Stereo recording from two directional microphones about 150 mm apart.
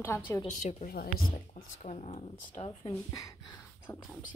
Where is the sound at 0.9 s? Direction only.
80° left.